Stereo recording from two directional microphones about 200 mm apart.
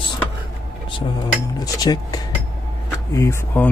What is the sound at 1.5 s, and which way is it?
Cutlery, 20° left (ahead or behind).